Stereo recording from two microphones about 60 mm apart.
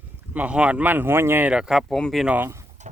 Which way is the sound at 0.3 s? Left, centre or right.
Centre.